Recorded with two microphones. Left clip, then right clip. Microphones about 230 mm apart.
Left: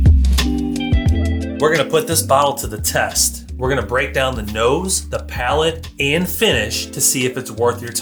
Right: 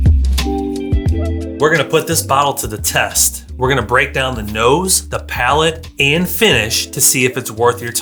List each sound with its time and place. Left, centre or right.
0.0 s music: centre
1.9 s speech: right
4.2 s speech: right
4.7 s speech: right